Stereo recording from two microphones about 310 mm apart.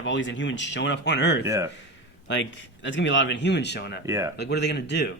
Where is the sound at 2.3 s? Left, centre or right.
Left.